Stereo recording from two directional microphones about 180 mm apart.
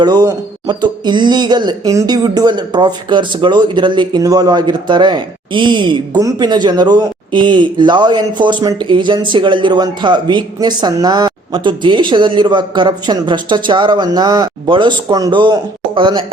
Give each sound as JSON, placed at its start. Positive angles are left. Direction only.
{"t": 0.0, "sound": "speech", "side_deg": -25}